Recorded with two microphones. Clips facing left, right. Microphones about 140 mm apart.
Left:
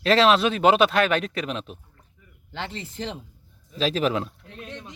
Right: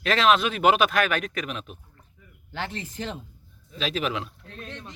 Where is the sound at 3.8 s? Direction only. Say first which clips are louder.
Left 5 dB; 35° left (ahead or behind).